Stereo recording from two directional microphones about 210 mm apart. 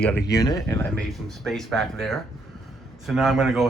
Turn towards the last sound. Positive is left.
turn(degrees=0)  # may be behind; listen again after turning